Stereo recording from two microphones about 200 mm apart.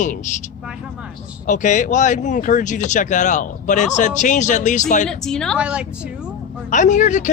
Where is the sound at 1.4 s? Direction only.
40° left (ahead or behind).